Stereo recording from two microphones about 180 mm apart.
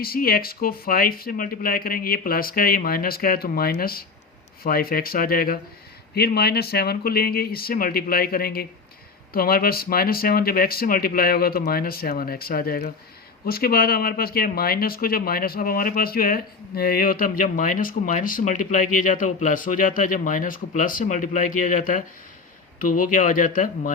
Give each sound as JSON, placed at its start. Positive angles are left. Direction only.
{"t": 0.0, "sound": "speech", "side_deg": 55}